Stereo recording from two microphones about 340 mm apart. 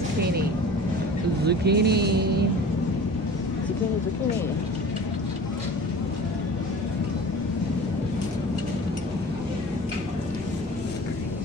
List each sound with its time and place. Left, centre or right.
1.4 s speech: right